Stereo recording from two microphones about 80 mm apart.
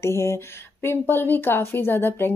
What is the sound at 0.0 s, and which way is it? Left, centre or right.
A woman's voice, left.